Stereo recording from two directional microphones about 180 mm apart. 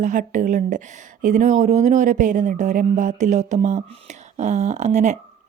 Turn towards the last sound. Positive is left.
turn(degrees=-40)  # may be behind; listen again after turning